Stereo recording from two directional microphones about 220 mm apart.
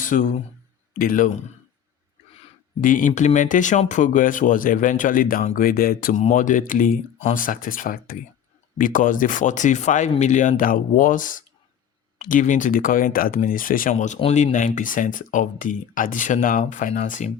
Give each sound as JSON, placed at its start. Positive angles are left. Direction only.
{"t": 0.0, "sound": "speech", "side_deg": 35}
{"t": 2.4, "sound": "speech", "side_deg": 35}